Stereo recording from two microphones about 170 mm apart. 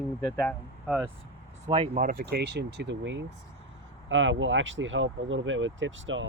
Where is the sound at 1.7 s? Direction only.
35° right (ahead or behind).